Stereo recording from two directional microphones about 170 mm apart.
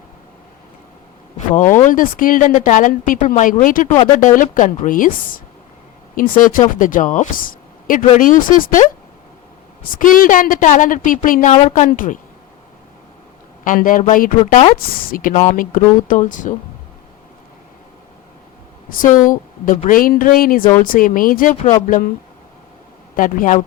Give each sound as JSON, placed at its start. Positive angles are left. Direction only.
{"t": 1.8, "sound": "a woman's voice", "side_deg": 50}
{"t": 13.7, "sound": "a woman's voice", "side_deg": 50}
{"t": 18.9, "sound": "a woman's voice", "side_deg": 55}
{"t": 23.1, "sound": "a woman's voice", "side_deg": 55}